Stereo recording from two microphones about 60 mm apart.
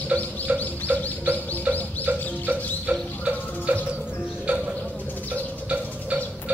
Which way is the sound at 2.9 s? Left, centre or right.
Right.